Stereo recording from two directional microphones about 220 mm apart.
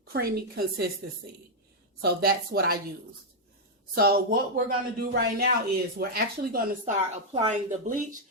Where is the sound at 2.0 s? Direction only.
45° right (ahead or behind).